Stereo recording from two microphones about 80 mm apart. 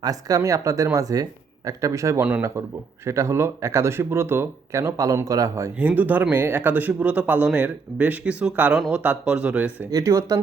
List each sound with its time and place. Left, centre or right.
0.0 s speech: right
5.8 s a man's voice: right
9.9 s speech: right